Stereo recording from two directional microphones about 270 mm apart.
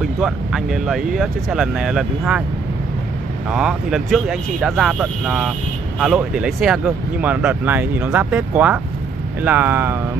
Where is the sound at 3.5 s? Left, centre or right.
Centre.